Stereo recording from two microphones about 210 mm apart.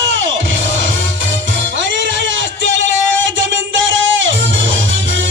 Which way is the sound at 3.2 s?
65° right (ahead or behind).